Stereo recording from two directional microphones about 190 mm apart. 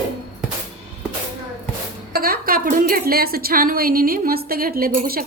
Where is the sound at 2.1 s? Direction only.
50° right (ahead or behind).